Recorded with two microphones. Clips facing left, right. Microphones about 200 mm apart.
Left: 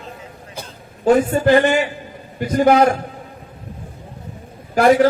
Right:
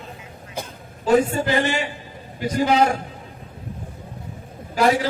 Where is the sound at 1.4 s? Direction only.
55° left (ahead or behind).